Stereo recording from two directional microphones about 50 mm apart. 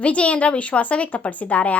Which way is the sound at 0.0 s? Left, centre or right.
Left.